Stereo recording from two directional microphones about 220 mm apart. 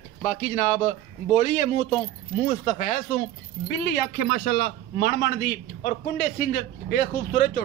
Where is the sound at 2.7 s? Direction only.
35° left (ahead or behind).